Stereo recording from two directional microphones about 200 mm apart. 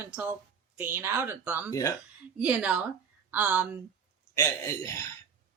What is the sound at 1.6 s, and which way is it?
Speech, 15° left (ahead or behind).